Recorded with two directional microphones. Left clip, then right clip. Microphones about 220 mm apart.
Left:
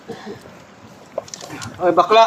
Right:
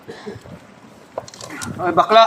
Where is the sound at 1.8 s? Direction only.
40° right (ahead or behind).